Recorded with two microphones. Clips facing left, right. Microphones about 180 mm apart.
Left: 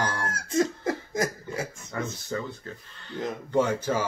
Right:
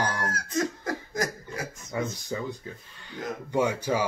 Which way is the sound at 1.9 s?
15° right (ahead or behind).